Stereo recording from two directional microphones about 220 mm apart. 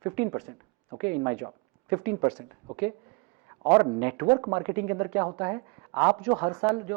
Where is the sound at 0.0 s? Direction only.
20° right (ahead or behind).